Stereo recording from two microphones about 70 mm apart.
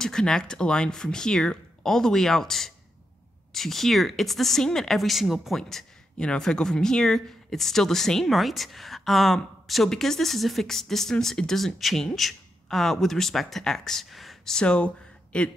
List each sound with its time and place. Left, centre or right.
0.0 s speech: centre